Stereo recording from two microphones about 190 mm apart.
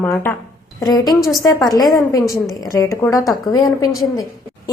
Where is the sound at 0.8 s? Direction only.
20° left (ahead or behind).